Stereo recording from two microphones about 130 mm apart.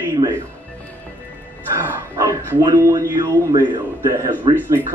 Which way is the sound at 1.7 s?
20° right (ahead or behind).